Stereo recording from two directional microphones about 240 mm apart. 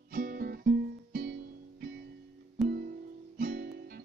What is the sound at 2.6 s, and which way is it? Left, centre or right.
Music, right.